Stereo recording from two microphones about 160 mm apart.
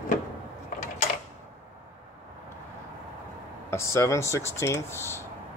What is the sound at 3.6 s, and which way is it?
Speech, 15° left (ahead or behind).